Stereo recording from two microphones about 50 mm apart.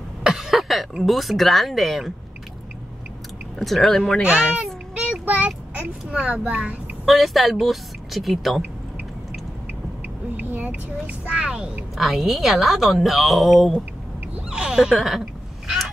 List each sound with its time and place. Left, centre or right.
0.3 s cough: centre
1.0 s a woman's voice: centre
3.5 s a woman's voice: centre
4.2 s a child's voice: centre
4.9 s child singing: right
7.1 s a woman's voice: centre
10.3 s a sound: right
11.2 s a child's voice: centre
12.0 s a woman's voice: centre
14.3 s speech: centre
15.0 s a sound: centre